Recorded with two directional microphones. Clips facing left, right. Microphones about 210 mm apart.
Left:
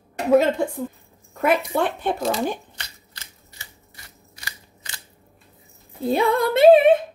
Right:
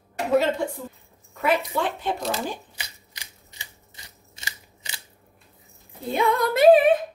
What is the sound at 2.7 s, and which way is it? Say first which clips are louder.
Scissors: even; 15° right (ahead or behind).